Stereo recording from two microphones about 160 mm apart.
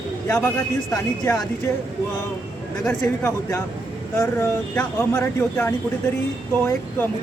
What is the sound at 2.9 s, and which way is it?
Speech, 10° left (ahead or behind).